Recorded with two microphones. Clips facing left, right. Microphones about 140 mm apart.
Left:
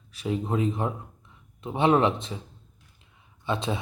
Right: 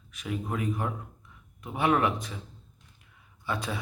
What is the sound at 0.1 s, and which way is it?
Speech, 30° left (ahead or behind).